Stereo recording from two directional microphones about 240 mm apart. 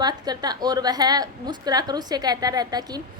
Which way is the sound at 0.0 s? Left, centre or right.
Centre.